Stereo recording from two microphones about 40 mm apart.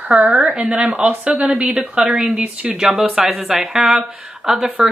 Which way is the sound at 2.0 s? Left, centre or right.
Right.